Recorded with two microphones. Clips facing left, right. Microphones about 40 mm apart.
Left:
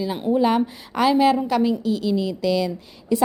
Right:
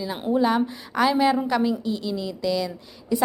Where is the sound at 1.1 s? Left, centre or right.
Centre.